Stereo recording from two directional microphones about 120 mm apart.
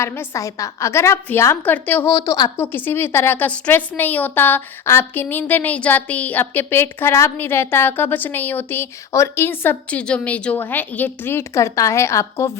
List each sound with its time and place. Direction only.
0.0 s a woman's voice: 20° left (ahead or behind)
2.6 s a woman's voice: 15° left (ahead or behind)